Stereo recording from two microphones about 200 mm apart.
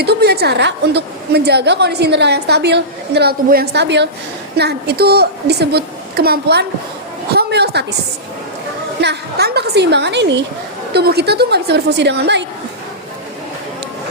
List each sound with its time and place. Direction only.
0.0 s a woman's voice: 55° right (ahead or behind)
9.0 s a woman's voice: 55° right (ahead or behind)